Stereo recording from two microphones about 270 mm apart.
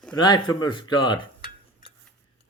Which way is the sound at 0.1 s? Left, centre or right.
Centre.